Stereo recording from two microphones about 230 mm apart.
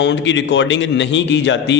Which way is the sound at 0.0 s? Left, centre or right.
Left.